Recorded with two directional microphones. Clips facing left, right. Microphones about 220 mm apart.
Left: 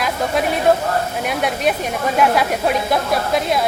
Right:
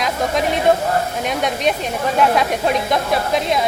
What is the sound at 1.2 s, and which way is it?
Speech, 5° left (ahead or behind).